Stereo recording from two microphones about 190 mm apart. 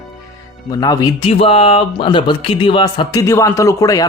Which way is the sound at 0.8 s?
20° left (ahead or behind).